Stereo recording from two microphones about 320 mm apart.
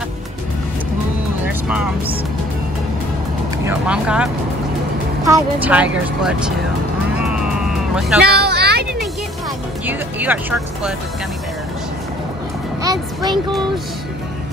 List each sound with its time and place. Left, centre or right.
1.4 s music: centre
3.6 s speech: centre
7.2 s vehicle: centre
8.2 s vehicle: right
9.8 s speech: centre
12.8 s music: centre